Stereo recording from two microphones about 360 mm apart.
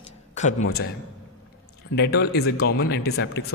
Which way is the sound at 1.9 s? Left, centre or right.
Left.